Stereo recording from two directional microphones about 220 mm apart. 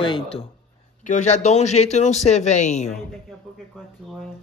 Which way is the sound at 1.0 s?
35° left (ahead or behind).